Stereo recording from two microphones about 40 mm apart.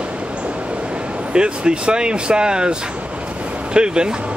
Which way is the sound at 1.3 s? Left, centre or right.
Right.